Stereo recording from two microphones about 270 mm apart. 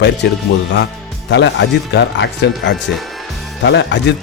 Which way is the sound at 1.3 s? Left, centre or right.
Left.